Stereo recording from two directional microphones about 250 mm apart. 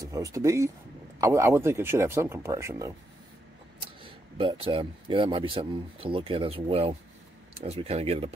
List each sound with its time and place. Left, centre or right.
0.0 s speech: centre